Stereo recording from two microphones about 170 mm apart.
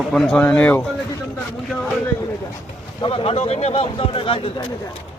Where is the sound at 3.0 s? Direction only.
30° left (ahead or behind).